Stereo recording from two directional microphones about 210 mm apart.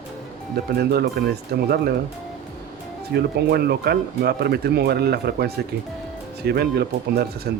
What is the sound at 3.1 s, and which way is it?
Speech, 50° right (ahead or behind).